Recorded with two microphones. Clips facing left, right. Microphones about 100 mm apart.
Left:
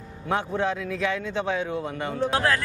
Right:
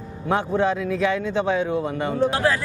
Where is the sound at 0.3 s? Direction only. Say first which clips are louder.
Right 4 dB; 25° right (ahead or behind).